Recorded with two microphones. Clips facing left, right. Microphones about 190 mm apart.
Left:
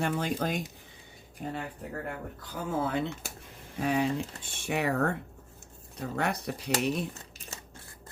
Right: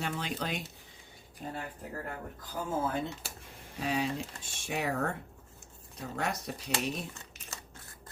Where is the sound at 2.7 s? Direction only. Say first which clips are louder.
Left 3 dB; 70° left (ahead or behind).